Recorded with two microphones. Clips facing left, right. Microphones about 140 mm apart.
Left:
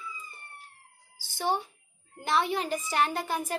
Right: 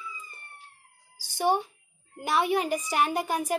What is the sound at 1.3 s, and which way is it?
A woman's voice, 15° right (ahead or behind).